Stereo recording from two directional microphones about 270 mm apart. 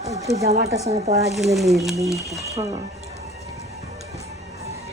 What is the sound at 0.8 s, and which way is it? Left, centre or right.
Speech, right.